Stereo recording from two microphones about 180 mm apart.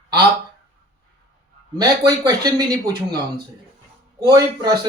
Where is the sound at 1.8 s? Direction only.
20° right (ahead or behind).